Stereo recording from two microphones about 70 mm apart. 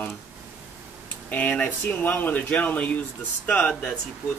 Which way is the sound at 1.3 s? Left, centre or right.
Left.